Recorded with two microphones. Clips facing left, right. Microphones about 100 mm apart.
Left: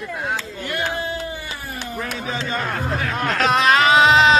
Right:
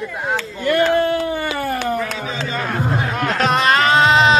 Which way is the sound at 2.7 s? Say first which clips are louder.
Right 3 dB; 25° right (ahead or behind).